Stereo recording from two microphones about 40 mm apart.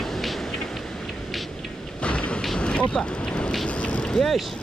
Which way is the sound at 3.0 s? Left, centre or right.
Left.